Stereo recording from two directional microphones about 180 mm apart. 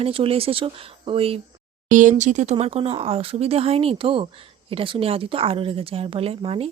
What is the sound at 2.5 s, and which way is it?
Speech, 30° right (ahead or behind).